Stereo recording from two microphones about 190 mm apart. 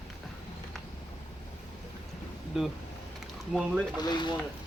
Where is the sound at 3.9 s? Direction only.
20° left (ahead or behind).